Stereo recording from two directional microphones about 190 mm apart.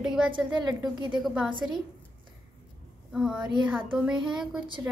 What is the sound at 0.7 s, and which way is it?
Speech, 25° right (ahead or behind).